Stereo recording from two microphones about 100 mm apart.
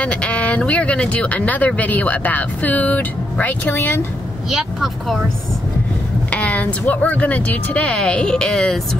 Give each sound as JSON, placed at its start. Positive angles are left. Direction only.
{"t": 0.0, "sound": "speech", "side_deg": 10}
{"t": 4.5, "sound": "speech", "side_deg": 0}
{"t": 6.3, "sound": "speech", "side_deg": 15}